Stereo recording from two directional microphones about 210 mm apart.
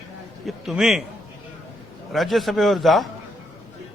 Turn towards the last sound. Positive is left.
turn(degrees=0)  # may be behind; listen again after turning